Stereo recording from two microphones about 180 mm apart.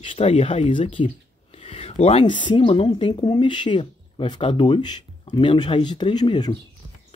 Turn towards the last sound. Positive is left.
turn(degrees=-25)  # may be behind; listen again after turning